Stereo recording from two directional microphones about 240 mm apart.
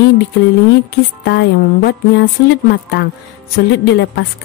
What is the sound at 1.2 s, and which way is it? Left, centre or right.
A woman's voice, left.